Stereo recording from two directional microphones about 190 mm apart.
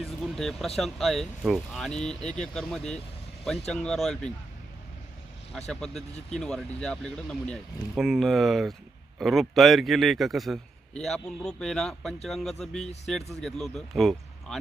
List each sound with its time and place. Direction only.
0.0 s a man's voice: centre (ahead or behind)
5.5 s a man's voice: 5° left (ahead or behind)